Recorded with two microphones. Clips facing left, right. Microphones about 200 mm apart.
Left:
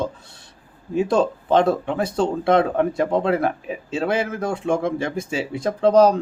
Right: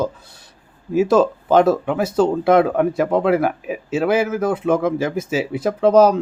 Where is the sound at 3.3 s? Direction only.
10° right (ahead or behind).